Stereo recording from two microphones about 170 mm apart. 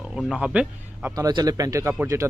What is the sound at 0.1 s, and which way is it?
Speech, 5° right (ahead or behind).